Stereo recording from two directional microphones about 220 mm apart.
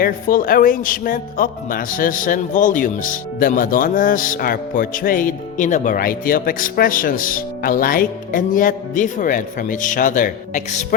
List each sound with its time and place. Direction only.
0.0 s a man's voice: 40° left (ahead or behind)